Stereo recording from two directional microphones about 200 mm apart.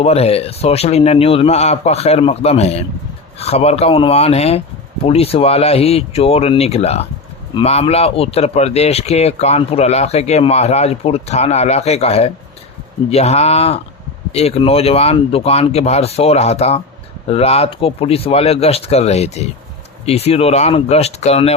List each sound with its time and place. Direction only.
0.0 s speech: 30° left (ahead or behind)